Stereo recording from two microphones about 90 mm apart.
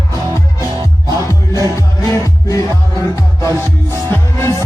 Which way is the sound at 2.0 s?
35° left (ahead or behind).